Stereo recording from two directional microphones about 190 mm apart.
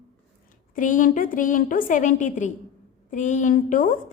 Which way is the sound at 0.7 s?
45° left (ahead or behind).